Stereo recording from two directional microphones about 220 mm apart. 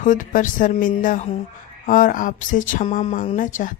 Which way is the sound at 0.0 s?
35° left (ahead or behind).